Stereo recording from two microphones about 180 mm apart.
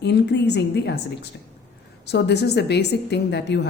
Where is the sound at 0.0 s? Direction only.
70° left (ahead or behind).